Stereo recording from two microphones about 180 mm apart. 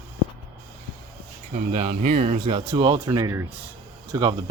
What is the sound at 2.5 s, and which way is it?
Speech, 25° right (ahead or behind).